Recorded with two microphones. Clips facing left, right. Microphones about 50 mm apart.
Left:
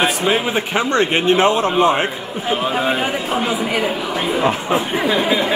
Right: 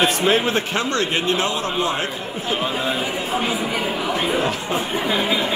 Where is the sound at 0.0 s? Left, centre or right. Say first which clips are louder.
Left 1 dB; centre.